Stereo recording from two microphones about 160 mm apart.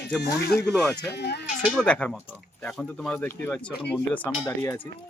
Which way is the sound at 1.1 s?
90° left.